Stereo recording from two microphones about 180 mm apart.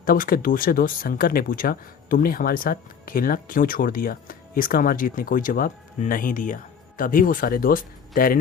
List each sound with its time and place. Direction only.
0.0 s speech: 50° left (ahead or behind)